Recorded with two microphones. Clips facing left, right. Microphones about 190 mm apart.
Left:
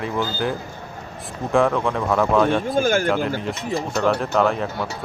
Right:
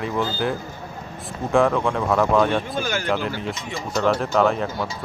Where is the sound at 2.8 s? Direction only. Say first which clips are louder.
Left 7 dB; 50° left (ahead or behind).